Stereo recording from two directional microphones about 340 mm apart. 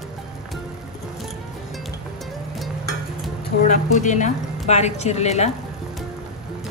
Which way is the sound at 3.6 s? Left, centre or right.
Left.